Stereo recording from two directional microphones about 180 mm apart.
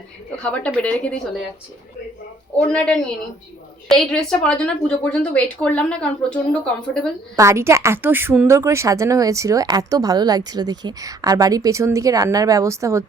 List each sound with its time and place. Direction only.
0.4 s speech: 5° left (ahead or behind)
2.6 s a woman's voice: 5° left (ahead or behind)
7.3 s a woman's voice: 15° right (ahead or behind)